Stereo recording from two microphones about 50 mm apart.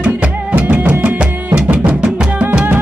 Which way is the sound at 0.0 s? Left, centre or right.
Right.